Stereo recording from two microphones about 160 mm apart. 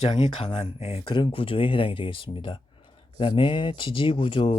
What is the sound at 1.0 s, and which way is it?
Speech, 30° left (ahead or behind).